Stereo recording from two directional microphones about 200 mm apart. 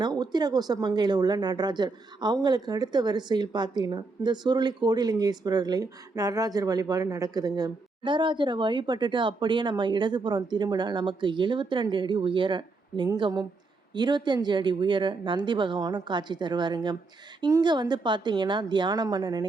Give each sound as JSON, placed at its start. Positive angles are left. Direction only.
{"t": 0.0, "sound": "speech", "side_deg": -20}